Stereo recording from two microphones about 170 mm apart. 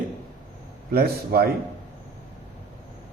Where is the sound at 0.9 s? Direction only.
65° right (ahead or behind).